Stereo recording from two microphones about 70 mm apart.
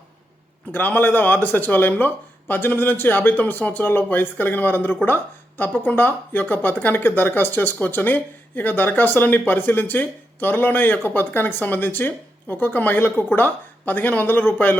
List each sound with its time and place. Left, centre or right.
0.7 s speech: left